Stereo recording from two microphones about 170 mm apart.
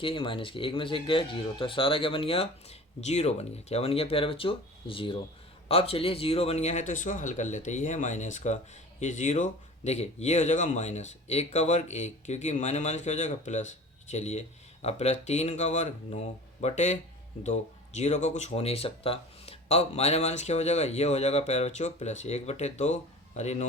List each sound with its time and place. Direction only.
0.0 s speech: 30° left (ahead or behind)